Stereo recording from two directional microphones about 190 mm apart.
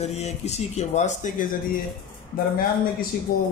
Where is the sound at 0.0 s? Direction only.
35° left (ahead or behind).